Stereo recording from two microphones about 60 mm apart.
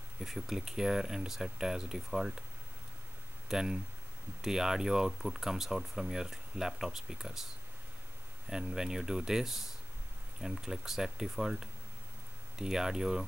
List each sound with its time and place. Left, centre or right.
0.2 s speech: centre
3.4 s speech: centre
8.5 s speech: centre